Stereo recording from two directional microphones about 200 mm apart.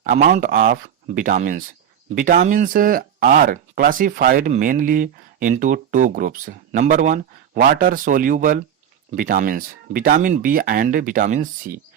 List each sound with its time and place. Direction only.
0.1 s speech: 40° right (ahead or behind)